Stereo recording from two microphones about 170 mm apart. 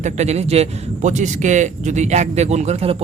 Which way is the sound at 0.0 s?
40° right (ahead or behind).